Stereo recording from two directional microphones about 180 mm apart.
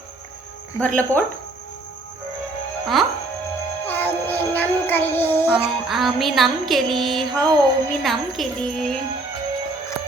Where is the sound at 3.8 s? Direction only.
10° left (ahead or behind).